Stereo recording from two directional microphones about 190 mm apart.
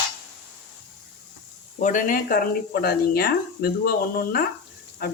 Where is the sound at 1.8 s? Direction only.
45° left (ahead or behind).